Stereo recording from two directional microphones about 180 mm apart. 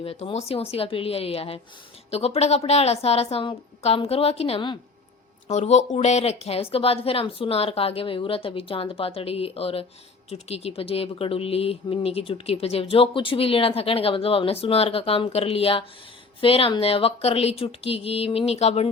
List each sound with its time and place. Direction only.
0.0 s speech: 30° left (ahead or behind)